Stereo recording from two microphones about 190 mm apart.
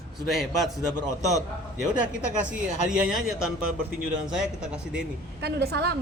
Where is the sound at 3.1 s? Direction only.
5° right (ahead or behind).